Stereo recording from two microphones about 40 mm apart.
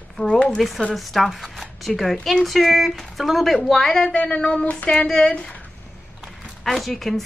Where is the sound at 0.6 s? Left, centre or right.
Centre.